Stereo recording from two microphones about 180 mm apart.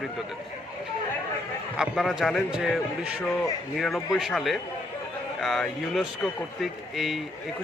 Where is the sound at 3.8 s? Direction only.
Centre (ahead or behind).